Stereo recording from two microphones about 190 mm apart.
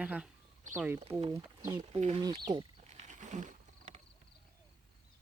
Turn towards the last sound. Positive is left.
turn(degrees=-40)  # may be behind; listen again after turning